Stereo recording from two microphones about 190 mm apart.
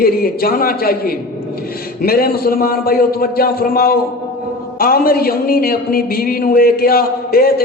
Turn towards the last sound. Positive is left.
turn(degrees=50)  # may be behind; listen again after turning